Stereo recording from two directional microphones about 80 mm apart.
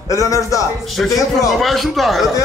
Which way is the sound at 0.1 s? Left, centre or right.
Left.